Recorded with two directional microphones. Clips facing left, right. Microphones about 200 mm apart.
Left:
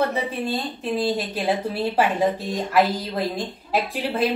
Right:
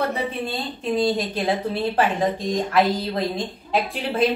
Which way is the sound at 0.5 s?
5° left (ahead or behind).